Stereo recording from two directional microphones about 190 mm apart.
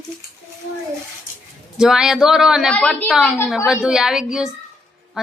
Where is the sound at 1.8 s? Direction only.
5° right (ahead or behind).